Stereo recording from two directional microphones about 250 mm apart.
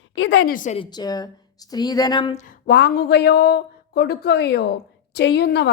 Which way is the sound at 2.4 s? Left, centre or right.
Left.